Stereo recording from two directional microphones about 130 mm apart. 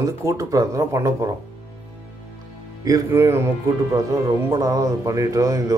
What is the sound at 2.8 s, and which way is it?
Speech, 25° right (ahead or behind).